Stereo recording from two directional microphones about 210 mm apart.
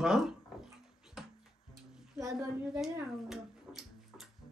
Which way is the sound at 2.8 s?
Centre (ahead or behind).